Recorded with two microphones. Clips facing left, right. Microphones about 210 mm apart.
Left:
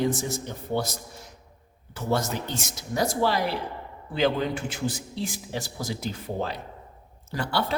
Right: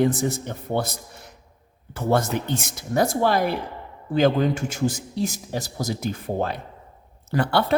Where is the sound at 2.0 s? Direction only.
55° right (ahead or behind).